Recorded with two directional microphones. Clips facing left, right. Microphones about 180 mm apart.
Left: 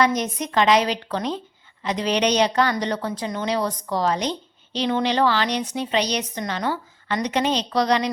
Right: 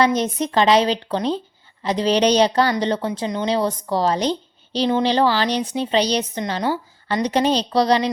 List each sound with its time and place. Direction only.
0.0 s a woman's voice: 30° right (ahead or behind)